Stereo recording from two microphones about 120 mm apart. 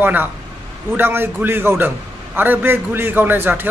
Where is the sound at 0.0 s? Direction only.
15° right (ahead or behind).